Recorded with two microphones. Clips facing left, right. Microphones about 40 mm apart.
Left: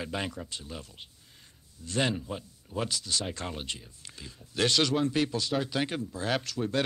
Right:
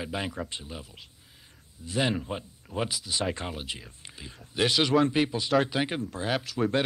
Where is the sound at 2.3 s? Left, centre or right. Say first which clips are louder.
Right 2 dB; right.